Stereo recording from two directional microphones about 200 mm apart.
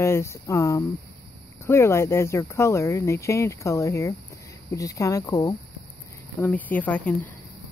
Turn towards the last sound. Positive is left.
turn(degrees=10)  # may be behind; listen again after turning